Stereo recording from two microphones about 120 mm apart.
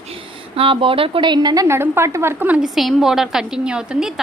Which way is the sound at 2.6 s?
Centre (ahead or behind).